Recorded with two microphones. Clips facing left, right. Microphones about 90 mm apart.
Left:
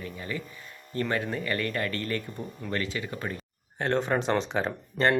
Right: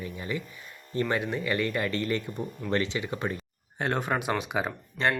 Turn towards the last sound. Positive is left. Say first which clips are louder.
# left 3 dB
turn(degrees=-5)  # may be behind; listen again after turning